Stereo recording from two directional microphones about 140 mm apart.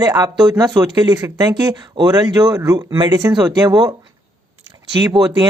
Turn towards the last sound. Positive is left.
turn(degrees=-30)  # may be behind; listen again after turning